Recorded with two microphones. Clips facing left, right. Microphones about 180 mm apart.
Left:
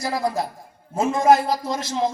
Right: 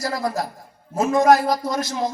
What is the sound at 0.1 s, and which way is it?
A man's voice, 25° left (ahead or behind).